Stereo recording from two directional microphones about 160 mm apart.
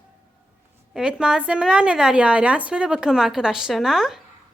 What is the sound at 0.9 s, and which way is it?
A woman's voice, 5° right (ahead or behind).